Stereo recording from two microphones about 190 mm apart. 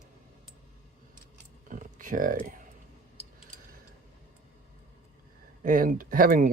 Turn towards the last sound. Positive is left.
turn(degrees=-50)  # may be behind; listen again after turning